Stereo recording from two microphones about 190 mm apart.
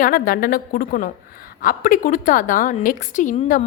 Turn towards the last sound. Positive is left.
turn(degrees=45)  # may be behind; listen again after turning